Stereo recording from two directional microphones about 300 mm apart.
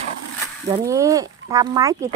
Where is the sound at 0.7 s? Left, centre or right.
Centre.